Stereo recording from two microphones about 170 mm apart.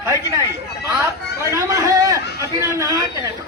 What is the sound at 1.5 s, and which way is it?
A man's voice, 20° right (ahead or behind).